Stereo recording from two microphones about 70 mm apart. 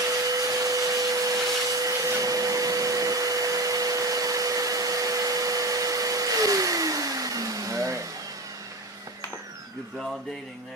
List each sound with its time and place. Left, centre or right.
0.1 s vacuum cleaner: right